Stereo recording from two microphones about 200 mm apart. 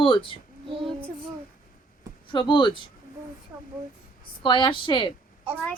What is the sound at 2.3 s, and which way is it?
Speech, 25° left (ahead or behind).